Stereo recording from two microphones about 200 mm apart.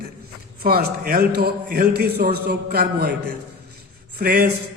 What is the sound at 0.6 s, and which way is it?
A man's voice, 50° right (ahead or behind).